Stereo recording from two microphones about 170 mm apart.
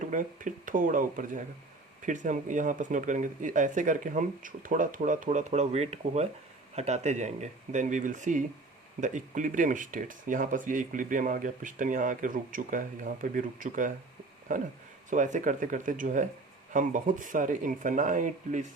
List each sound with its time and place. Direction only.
0.0 s speech: 50° right (ahead or behind)